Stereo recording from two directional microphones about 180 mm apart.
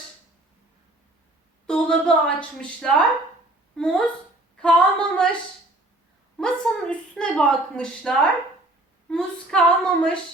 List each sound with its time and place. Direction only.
1.6 s speech: 5° left (ahead or behind)
4.5 s a woman's voice: 5° left (ahead or behind)
6.3 s a woman's voice: 5° left (ahead or behind)